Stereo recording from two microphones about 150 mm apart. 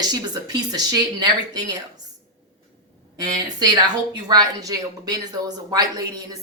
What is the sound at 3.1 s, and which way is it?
Speech, 25° right (ahead or behind).